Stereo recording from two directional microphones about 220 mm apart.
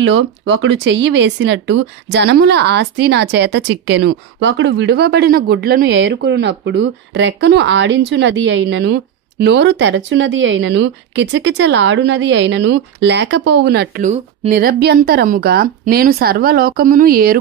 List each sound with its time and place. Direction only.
0.0 s speech: 55° right (ahead or behind)